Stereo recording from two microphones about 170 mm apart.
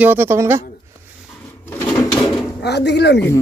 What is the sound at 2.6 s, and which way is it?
Speech, 80° left.